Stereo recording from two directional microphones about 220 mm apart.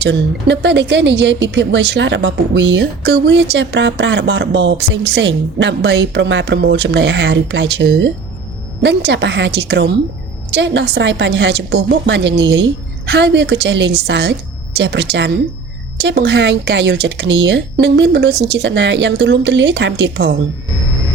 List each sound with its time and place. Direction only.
0.0 s a woman's voice: 55° right (ahead or behind)